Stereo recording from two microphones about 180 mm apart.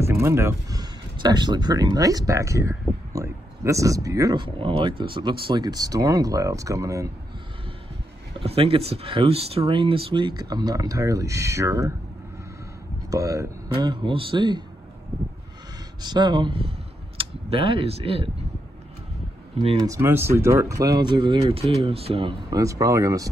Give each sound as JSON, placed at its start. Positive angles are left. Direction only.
{"t": 0.0, "sound": "speech", "side_deg": -15}
{"t": 8.4, "sound": "speech", "side_deg": -30}
{"t": 13.1, "sound": "speech", "side_deg": -20}
{"t": 16.0, "sound": "speech", "side_deg": -25}
{"t": 19.8, "sound": "speech", "side_deg": -15}
{"t": 22.5, "sound": "speech", "side_deg": -20}